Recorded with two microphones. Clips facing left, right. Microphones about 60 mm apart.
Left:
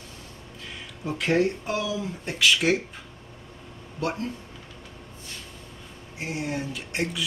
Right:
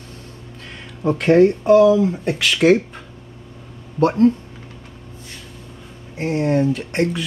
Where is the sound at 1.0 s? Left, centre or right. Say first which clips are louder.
Right 10 dB; right.